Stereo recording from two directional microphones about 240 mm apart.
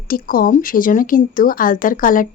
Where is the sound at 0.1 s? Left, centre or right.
Left.